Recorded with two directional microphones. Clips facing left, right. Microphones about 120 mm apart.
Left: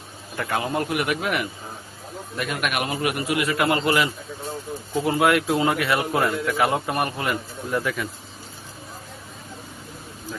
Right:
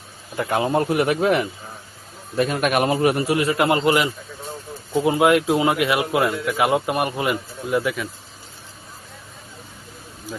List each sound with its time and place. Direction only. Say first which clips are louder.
0.3 s a man's voice: right 5 dB; 20° right (ahead or behind)
7.7 s a man's voice: right 3 dB; 5° right (ahead or behind)